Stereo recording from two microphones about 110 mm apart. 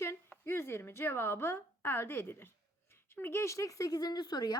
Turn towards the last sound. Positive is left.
turn(degrees=40)  # may be behind; listen again after turning